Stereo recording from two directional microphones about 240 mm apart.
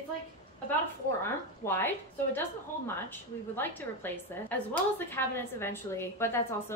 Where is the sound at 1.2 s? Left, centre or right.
Centre.